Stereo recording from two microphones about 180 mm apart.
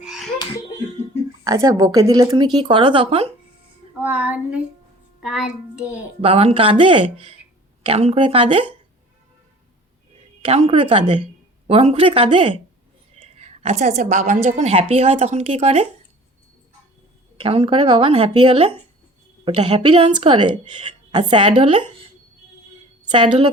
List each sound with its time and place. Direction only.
0.0 s a sound: 5° right (ahead or behind)
1.5 s speech: 20° right (ahead or behind)
4.0 s a sound: 10° right (ahead or behind)
5.2 s a child's voice: 5° right (ahead or behind)
6.2 s speech: 35° right (ahead or behind)
10.4 s speech: 35° right (ahead or behind)
13.1 s whispering: 35° right (ahead or behind)
14.4 s speech: 35° right (ahead or behind)
17.3 s speech: 30° right (ahead or behind)
23.2 s speech: 30° right (ahead or behind)